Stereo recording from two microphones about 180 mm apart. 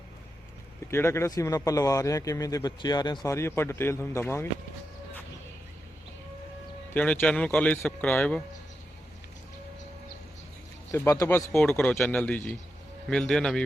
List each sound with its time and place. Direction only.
0.9 s a man's voice: 15° left (ahead or behind)
6.9 s a man's voice: 10° left (ahead or behind)
10.9 s a man's voice: 15° left (ahead or behind)